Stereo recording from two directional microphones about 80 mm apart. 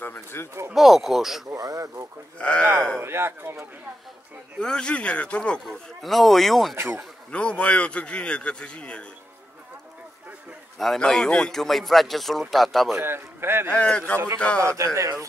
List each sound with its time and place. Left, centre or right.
0.0 s a sound: left
0.7 s speech: centre
1.5 s radio: right
2.3 s a man's voice: centre
3.0 s speech: right
4.6 s a man's voice: centre
5.9 s speech: centre
6.7 s speech: right
7.2 s a man's voice: centre
11.0 s speech: centre
12.9 s speech: right
13.7 s a man's voice: centre
14.6 s speech: right